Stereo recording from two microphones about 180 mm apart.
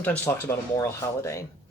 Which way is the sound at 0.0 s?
10° left (ahead or behind).